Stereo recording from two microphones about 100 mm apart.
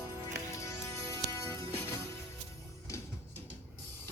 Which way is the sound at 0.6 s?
30° left (ahead or behind).